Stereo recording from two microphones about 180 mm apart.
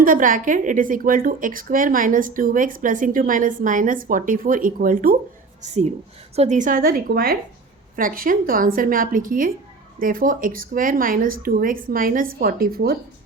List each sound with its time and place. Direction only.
0.0 s a woman's voice: 50° right (ahead or behind)
5.6 s a woman's voice: 40° right (ahead or behind); by 13.0 s 55° right (ahead or behind)